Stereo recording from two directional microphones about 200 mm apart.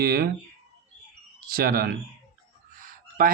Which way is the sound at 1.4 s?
45° right (ahead or behind).